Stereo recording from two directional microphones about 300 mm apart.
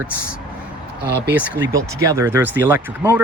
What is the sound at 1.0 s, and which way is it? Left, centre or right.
Speech, right.